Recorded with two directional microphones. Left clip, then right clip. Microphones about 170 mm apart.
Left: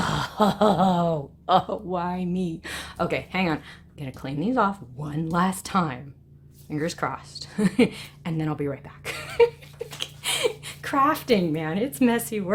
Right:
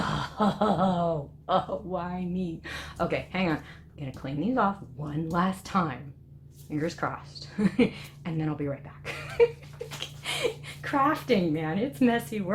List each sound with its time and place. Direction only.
0.0 s a woman's voice: 75° left (ahead or behind)